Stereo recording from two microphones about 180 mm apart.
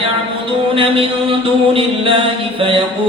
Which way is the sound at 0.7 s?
30° right (ahead or behind).